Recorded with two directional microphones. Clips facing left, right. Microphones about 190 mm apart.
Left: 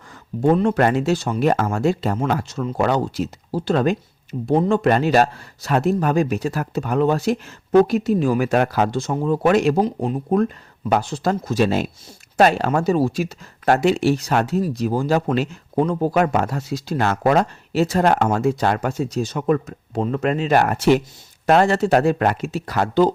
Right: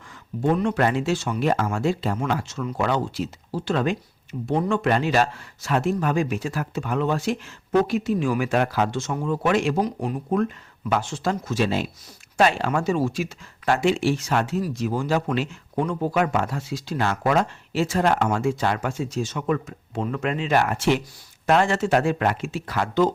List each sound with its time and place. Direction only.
0.5 s speech: 40° left (ahead or behind)
9.8 s speech: 30° left (ahead or behind)